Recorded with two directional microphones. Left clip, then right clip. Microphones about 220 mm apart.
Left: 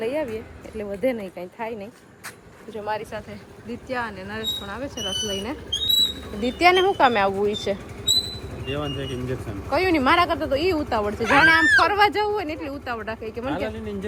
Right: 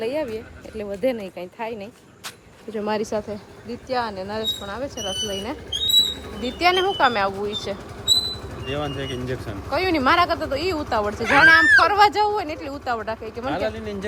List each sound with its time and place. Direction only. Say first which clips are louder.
0.0 s speech: right 1 dB; centre (ahead or behind)
2.7 s speech: right 3 dB; 40° right (ahead or behind)
3.7 s speech: right 3 dB; 5° right (ahead or behind)